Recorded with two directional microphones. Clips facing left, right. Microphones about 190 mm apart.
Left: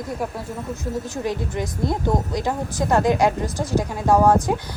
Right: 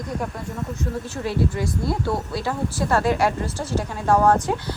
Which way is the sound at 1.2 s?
15° left (ahead or behind).